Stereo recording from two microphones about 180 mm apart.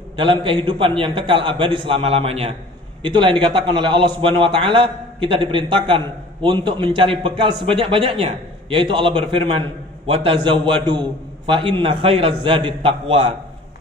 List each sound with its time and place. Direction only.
0.1 s a man's voice: 30° right (ahead or behind)